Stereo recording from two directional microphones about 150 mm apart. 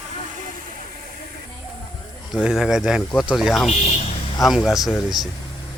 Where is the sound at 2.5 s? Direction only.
5° right (ahead or behind).